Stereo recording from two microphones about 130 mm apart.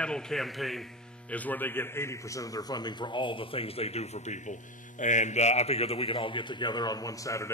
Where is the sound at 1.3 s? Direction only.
15° left (ahead or behind).